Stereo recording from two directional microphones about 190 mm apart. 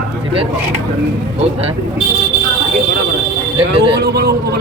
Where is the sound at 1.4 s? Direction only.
30° right (ahead or behind).